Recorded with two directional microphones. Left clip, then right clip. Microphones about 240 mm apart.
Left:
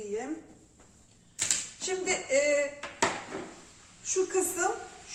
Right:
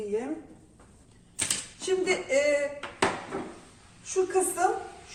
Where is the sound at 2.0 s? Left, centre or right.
Centre.